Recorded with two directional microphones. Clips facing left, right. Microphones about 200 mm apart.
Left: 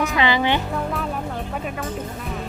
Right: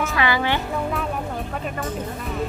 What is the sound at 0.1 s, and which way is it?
Speech, 20° left (ahead or behind).